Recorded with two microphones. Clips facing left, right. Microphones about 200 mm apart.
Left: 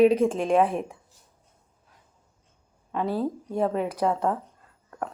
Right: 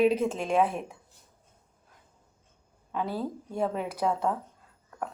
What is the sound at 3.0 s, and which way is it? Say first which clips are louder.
Speech: left 6 dB; 35° left (ahead or behind).